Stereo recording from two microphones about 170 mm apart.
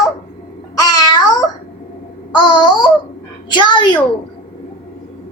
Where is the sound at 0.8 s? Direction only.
20° left (ahead or behind).